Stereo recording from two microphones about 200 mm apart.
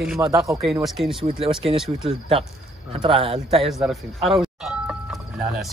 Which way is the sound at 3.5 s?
Centre (ahead or behind).